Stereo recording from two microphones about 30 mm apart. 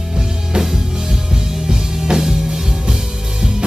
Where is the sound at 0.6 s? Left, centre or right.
Centre.